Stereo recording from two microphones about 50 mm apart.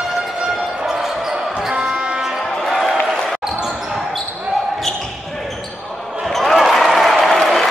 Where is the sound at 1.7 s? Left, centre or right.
Centre.